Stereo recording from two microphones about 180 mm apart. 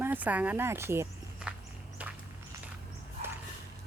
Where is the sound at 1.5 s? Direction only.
5° right (ahead or behind).